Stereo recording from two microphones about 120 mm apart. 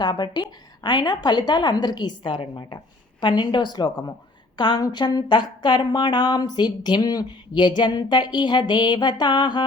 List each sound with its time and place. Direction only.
0.0 s speech: 35° left (ahead or behind)